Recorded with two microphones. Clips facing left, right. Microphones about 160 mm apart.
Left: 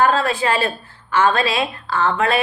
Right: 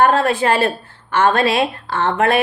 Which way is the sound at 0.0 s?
55° right (ahead or behind).